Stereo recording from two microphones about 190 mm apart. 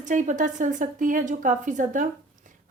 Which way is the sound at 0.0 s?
40° right (ahead or behind).